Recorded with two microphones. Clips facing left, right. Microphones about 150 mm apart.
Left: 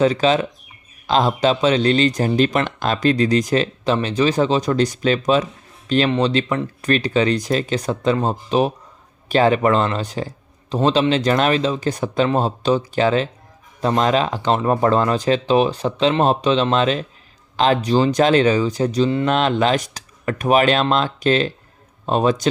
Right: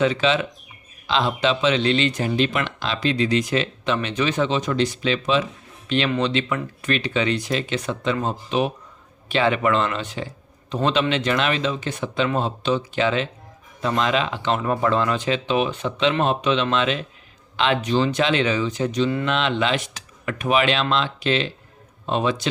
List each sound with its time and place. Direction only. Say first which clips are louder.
0.0 s speech: left 4 dB; 40° left (ahead or behind)